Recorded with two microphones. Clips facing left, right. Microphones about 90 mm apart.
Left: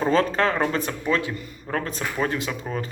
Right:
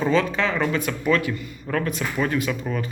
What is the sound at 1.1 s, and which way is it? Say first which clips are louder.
Speech: right 4 dB; 25° left (ahead or behind).